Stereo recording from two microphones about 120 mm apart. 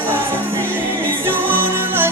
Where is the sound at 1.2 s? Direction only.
20° right (ahead or behind).